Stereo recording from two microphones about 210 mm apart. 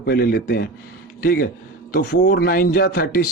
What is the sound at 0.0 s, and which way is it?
A man's voice, 50° left (ahead or behind).